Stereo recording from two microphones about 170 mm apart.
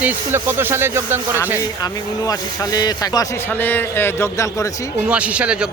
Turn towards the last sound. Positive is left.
turn(degrees=-5)  # may be behind; listen again after turning